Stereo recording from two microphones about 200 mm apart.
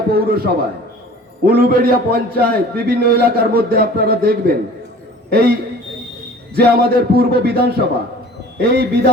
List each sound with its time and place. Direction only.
0.1 s a man's voice: 50° right (ahead or behind)